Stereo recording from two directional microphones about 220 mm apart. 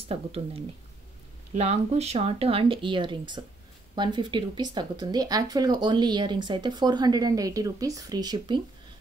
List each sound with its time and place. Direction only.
0.1 s speech: 25° right (ahead or behind)